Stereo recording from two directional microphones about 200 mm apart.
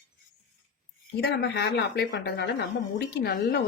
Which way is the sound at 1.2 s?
55° left (ahead or behind).